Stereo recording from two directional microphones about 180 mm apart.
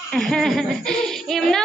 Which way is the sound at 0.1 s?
5° left (ahead or behind).